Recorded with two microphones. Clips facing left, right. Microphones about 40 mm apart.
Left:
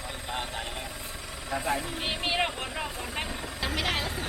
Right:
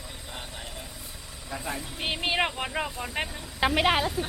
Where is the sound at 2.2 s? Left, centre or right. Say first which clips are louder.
Right 2 dB; centre.